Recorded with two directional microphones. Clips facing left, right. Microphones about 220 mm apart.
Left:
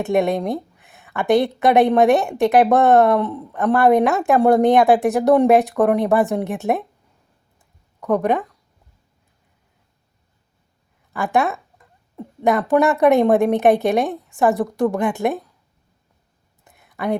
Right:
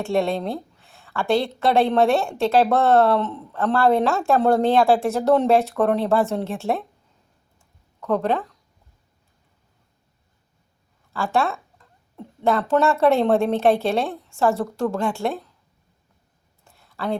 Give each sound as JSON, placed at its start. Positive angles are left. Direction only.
{"t": 0.0, "sound": "a woman's voice", "side_deg": 20}
{"t": 8.0, "sound": "a woman's voice", "side_deg": 15}
{"t": 11.1, "sound": "speech", "side_deg": 15}
{"t": 16.6, "sound": "a sound", "side_deg": 20}